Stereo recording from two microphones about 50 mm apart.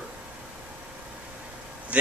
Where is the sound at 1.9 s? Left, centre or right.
Right.